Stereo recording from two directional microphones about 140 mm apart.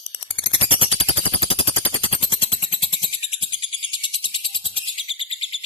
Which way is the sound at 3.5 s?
40° left (ahead or behind).